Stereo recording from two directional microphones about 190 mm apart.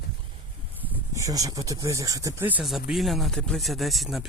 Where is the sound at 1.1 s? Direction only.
15° right (ahead or behind).